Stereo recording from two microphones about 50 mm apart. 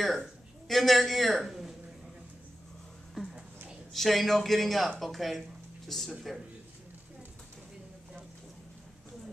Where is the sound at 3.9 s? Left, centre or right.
Centre.